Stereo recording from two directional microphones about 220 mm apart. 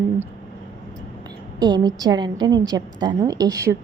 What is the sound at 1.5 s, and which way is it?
A woman's voice, 20° right (ahead or behind).